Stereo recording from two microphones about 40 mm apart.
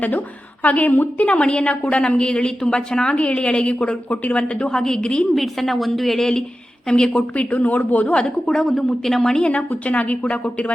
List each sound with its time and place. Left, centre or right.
0.6 s a woman's voice: left
1.3 s a woman's voice: left
4.1 s speech: left
4.4 s a woman's voice: left
4.7 s speech: centre
5.3 s a woman's voice: centre
7.2 s speech: left
8.1 s a woman's voice: left
8.6 s speech: centre
9.4 s speech: left